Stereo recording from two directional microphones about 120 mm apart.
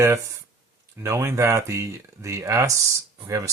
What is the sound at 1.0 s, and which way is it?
Speech, 25° right (ahead or behind).